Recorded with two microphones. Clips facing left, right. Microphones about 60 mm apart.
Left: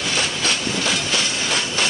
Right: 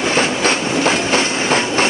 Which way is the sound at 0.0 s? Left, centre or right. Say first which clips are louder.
Right 7 dB; right.